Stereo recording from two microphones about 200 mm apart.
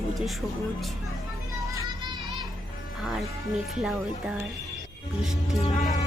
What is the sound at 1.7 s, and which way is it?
Music, 20° right (ahead or behind).